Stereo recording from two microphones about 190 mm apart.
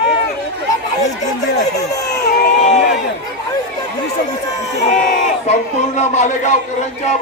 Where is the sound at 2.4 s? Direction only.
40° left (ahead or behind).